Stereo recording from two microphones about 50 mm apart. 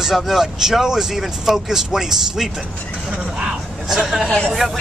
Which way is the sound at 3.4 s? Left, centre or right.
Centre.